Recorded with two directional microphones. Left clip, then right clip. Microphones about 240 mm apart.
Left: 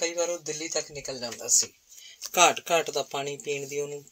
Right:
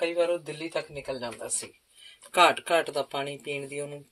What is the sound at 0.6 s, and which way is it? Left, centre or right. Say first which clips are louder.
Speech: left 1 dB; left.